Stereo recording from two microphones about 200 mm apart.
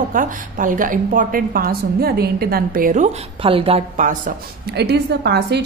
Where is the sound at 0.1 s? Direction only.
40° right (ahead or behind).